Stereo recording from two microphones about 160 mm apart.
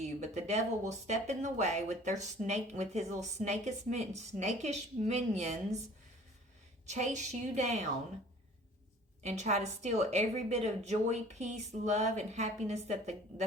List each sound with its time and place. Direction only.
0.0 s speech: 45° right (ahead or behind)
6.8 s speech: 45° right (ahead or behind)
9.2 s speech: 45° right (ahead or behind)